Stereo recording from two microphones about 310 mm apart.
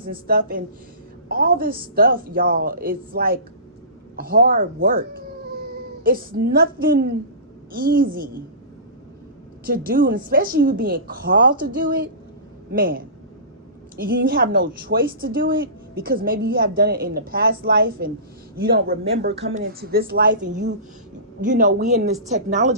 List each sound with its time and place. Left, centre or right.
0.0 s a woman's voice: right
9.6 s a woman's voice: right
12.7 s a woman's voice: right